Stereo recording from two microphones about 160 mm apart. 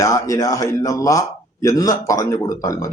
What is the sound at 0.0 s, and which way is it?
A man's voice, 20° left (ahead or behind).